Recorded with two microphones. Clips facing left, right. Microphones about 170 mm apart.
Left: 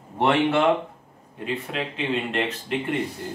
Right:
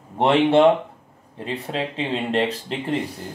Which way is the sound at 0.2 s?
25° right (ahead or behind).